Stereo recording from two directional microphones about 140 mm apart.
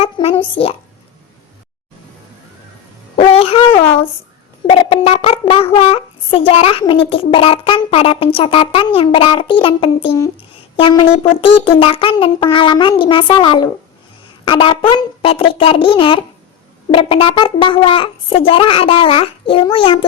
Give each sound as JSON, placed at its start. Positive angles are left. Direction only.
{"t": 0.0, "sound": "speech", "side_deg": 45}
{"t": 3.2, "sound": "a sound", "side_deg": 45}
{"t": 4.6, "sound": "speech", "side_deg": 40}